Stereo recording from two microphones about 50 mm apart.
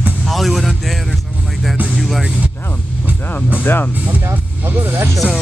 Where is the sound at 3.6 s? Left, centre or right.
Left.